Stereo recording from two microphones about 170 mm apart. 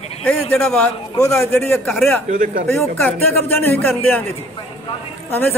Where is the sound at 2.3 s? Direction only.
50° right (ahead or behind).